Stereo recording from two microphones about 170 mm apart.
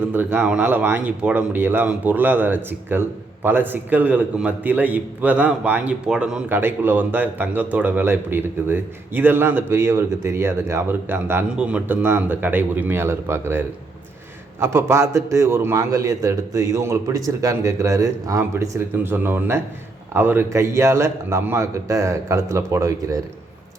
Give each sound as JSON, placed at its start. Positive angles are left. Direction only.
{"t": 0.0, "sound": "speech", "side_deg": -10}